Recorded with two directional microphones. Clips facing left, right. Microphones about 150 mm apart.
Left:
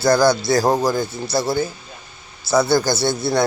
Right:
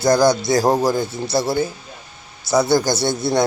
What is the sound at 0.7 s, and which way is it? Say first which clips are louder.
Rub: right 1 dB; centre (ahead or behind).